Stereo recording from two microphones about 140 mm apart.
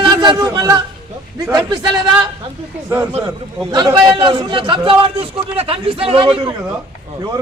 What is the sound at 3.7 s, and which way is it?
A man's voice, 30° right (ahead or behind).